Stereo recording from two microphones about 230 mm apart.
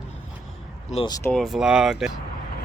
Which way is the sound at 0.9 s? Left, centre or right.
Left.